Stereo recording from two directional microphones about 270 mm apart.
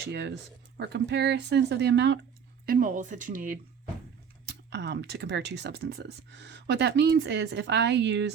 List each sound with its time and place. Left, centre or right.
0.0 s speech: right